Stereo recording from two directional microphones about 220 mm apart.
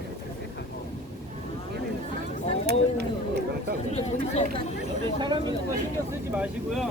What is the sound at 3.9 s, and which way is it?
Chatter, 30° left (ahead or behind).